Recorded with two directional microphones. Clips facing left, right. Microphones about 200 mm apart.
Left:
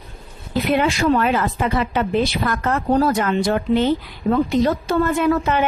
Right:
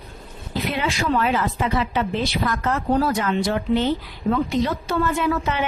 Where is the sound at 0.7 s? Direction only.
50° left (ahead or behind).